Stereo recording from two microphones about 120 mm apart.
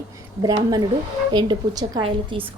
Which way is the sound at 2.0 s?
50° right (ahead or behind).